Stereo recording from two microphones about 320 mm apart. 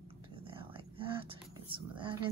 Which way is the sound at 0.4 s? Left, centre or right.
Centre.